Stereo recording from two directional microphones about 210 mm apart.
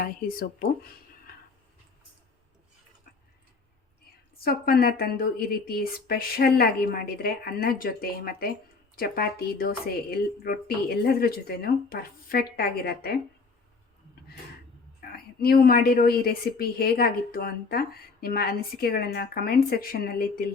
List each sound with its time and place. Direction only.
0.0 s a woman's voice: 45° left (ahead or behind)
4.4 s a woman's voice: 45° left (ahead or behind)
15.1 s a woman's voice: 45° left (ahead or behind)